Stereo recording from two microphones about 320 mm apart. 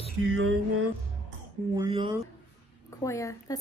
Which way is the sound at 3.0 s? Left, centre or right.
Centre.